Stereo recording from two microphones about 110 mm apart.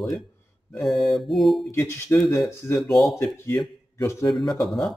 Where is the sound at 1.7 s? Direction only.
25° left (ahead or behind).